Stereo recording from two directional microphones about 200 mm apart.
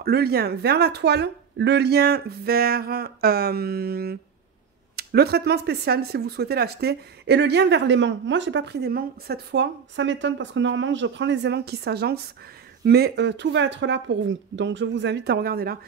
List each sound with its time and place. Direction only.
0.0 s speech: 50° right (ahead or behind)